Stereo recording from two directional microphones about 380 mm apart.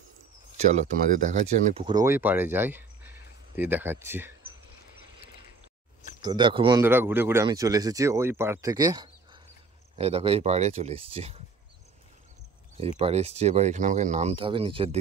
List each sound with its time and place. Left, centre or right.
0.6 s speech: centre
6.2 s speech: centre
12.8 s speech: centre